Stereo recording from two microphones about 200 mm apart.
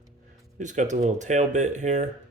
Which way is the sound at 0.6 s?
35° right (ahead or behind).